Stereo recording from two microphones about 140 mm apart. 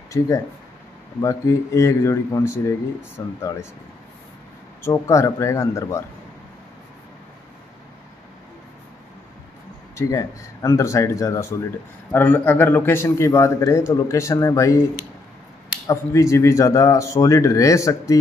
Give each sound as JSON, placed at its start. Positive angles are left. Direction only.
{"t": 1.2, "sound": "a man's voice", "side_deg": 20}
{"t": 4.8, "sound": "a man's voice", "side_deg": 20}
{"t": 9.9, "sound": "a man's voice", "side_deg": 20}
{"t": 15.9, "sound": "a man's voice", "side_deg": 20}